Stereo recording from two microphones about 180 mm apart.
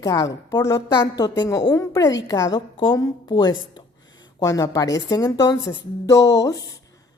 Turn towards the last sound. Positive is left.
turn(degrees=20)  # may be behind; listen again after turning